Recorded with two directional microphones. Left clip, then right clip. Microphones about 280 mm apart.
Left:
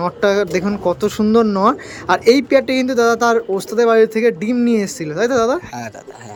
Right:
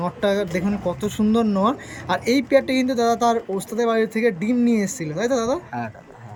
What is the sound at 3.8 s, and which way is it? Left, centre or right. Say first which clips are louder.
Speech: left 8 dB; centre.